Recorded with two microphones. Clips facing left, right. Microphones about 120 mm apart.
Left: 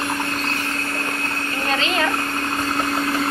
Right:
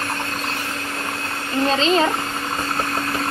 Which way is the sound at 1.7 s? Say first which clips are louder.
Right 4 dB; 25° right (ahead or behind).